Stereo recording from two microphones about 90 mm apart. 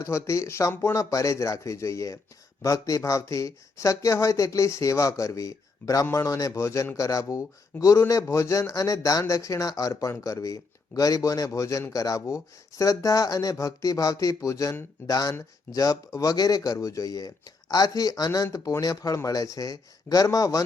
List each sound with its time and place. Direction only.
0.0 s speech: 35° left (ahead or behind)